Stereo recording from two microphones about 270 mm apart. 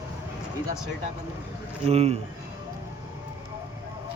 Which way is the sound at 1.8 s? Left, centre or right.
Right.